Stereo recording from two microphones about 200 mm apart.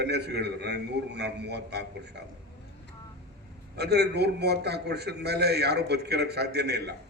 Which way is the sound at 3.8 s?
55° right (ahead or behind).